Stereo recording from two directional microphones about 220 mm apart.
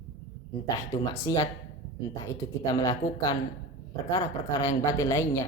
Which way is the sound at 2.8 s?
15° left (ahead or behind).